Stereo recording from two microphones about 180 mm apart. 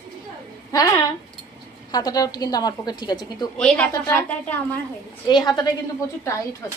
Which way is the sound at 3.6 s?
5° left (ahead or behind).